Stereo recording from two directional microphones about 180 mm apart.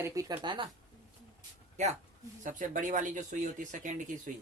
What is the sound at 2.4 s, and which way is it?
Speech, 45° right (ahead or behind).